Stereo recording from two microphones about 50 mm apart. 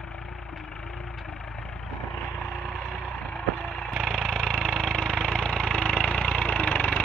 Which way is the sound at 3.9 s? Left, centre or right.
Centre.